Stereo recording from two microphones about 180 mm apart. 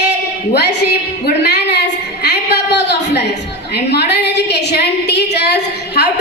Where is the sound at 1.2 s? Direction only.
65° left (ahead or behind).